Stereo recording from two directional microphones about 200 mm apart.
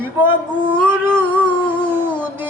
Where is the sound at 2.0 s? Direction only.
10° right (ahead or behind).